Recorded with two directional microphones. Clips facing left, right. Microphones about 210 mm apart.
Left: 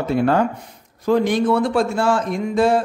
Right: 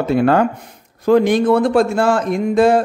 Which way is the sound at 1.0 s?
55° right (ahead or behind).